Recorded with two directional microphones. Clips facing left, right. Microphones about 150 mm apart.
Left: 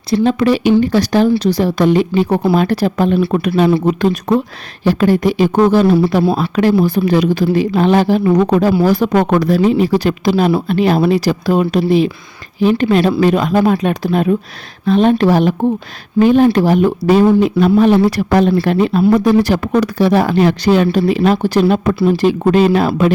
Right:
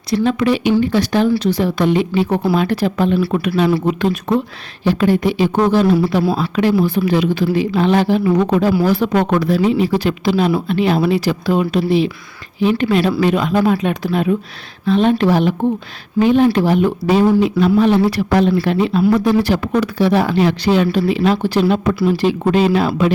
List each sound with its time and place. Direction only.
0.1 s speech: 35° left (ahead or behind); by 23.1 s 50° left (ahead or behind)